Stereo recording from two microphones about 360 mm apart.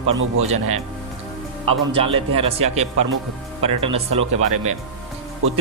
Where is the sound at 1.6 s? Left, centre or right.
Centre.